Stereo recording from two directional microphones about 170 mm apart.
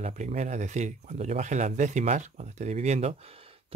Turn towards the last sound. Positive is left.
turn(degrees=-40)  # may be behind; listen again after turning